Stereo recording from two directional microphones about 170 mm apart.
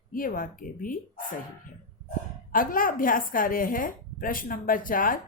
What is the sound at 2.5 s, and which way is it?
Speech, 55° left (ahead or behind).